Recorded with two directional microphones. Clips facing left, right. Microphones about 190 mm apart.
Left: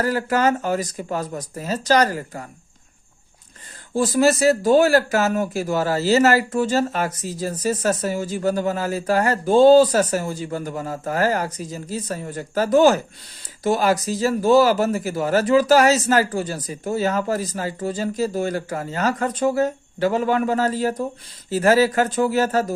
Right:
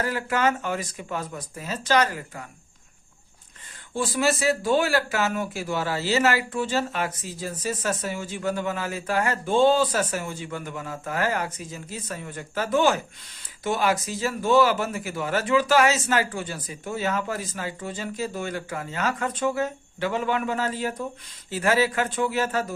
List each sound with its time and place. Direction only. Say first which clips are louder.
0.0 s speech: left 5 dB; 40° left (ahead or behind)
3.9 s speech: left 7 dB; 40° left (ahead or behind)